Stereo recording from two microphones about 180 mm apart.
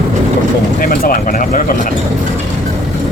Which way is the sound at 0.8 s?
50° left (ahead or behind).